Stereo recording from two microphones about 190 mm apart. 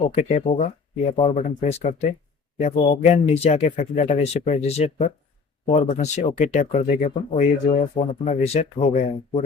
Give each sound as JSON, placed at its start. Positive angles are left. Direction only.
{"t": 0.1, "sound": "speech", "side_deg": 35}